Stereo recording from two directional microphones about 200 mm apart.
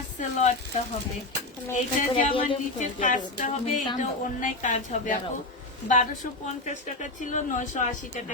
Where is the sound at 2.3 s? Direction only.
25° left (ahead or behind).